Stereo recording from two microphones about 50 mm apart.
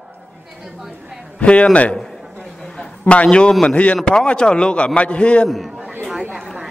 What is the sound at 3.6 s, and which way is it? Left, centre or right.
A man's voice, left.